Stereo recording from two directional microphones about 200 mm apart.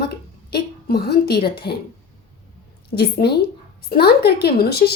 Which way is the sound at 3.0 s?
55° left (ahead or behind).